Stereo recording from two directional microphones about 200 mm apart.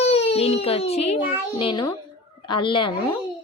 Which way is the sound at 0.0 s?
30° left (ahead or behind).